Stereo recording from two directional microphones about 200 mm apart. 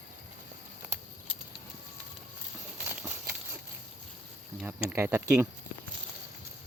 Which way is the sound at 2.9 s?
10° right (ahead or behind).